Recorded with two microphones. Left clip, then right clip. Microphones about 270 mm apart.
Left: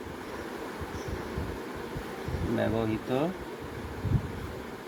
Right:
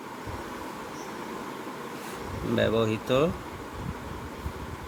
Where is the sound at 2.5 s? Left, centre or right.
Right.